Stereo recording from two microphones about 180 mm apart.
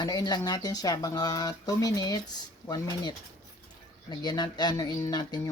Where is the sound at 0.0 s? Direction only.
20° left (ahead or behind).